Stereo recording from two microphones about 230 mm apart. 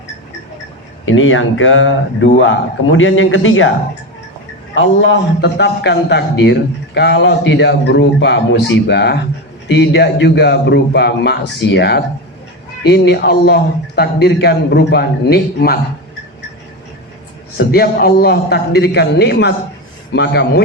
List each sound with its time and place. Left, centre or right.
1.0 s a man's voice: left
4.7 s a man's voice: left
17.6 s a man's voice: left